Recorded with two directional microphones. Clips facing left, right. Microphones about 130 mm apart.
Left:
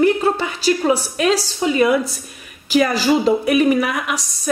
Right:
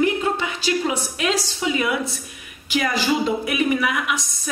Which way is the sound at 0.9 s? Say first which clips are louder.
Left 6 dB; 35° left (ahead or behind).